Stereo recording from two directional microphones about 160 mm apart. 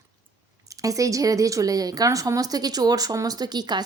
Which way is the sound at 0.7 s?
20° right (ahead or behind).